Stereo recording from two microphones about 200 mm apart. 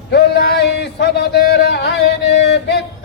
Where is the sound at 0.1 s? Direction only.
55° left (ahead or behind).